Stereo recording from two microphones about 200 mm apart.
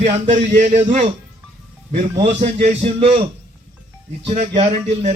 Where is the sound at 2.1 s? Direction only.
30° right (ahead or behind).